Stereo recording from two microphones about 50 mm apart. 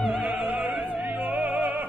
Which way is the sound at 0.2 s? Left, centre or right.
Right.